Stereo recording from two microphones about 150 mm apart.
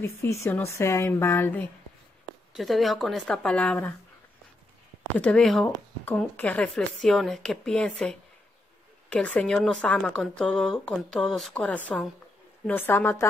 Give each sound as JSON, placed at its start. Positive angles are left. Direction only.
{"t": 0.0, "sound": "a woman's voice", "side_deg": 20}
{"t": 2.5, "sound": "speech", "side_deg": 0}
{"t": 5.2, "sound": "a woman's voice", "side_deg": 5}